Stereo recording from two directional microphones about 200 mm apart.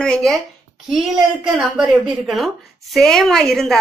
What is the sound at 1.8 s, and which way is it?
A woman's voice, centre (ahead or behind).